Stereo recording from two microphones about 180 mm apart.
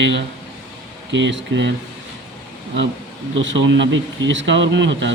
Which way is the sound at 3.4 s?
90° right.